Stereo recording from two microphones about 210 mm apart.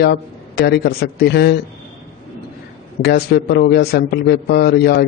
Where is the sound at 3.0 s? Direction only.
50° left (ahead or behind).